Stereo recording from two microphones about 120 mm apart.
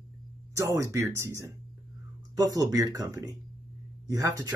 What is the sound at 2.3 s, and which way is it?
Speech, 30° right (ahead or behind).